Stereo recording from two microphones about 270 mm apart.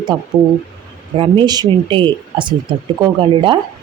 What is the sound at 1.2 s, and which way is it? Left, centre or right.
Speech, centre.